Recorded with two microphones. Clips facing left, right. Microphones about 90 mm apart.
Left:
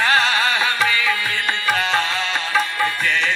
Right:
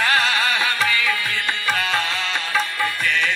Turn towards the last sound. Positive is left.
turn(degrees=35)  # may be behind; listen again after turning